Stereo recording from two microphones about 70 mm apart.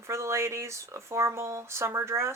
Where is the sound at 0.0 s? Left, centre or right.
Right.